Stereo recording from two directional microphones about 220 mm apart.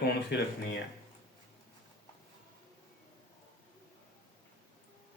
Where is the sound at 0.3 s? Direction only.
50° left (ahead or behind).